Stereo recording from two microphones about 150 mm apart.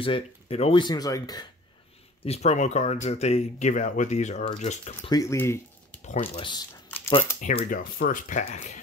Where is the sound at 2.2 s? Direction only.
45° left (ahead or behind).